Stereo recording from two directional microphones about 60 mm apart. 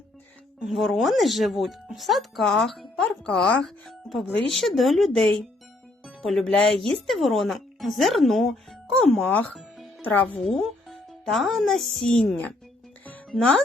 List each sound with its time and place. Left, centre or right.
0.8 s speech: centre
3.1 s speech: centre
3.8 s speech: centre
9.3 s speech: left
10.4 s speech: centre
13.3 s speech: centre